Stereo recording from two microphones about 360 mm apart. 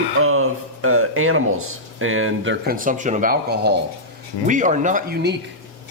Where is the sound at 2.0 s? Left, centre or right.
Right.